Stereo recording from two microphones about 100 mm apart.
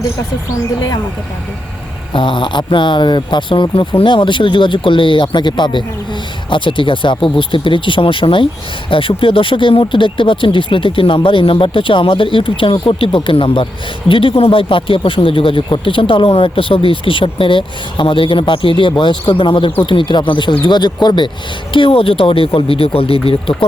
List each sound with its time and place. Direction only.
2.1 s speech: 55° left (ahead or behind)
21.7 s speech: 65° left (ahead or behind)